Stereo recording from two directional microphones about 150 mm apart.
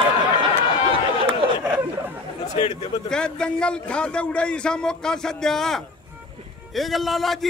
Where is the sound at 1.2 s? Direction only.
15° right (ahead or behind).